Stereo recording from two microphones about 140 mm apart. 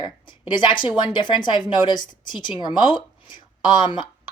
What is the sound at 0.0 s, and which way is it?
Speech, 30° left (ahead or behind).